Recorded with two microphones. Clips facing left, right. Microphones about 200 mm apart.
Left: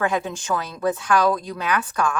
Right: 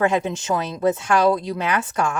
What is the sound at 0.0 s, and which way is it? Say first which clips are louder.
Speech: right 3 dB; 25° right (ahead or behind).